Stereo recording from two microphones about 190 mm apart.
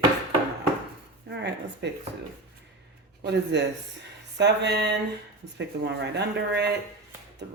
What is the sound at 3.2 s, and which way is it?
Speech, 65° right (ahead or behind).